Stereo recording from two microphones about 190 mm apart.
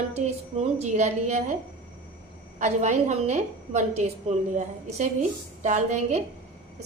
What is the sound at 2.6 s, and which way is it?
A woman's voice, 35° right (ahead or behind).